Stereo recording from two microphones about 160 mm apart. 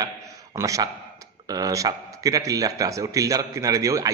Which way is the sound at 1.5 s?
20° right (ahead or behind).